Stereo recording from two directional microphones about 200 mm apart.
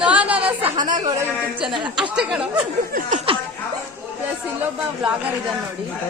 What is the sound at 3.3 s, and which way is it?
Speech, 25° right (ahead or behind).